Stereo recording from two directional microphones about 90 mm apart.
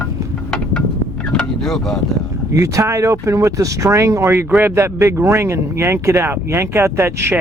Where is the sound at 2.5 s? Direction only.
35° right (ahead or behind).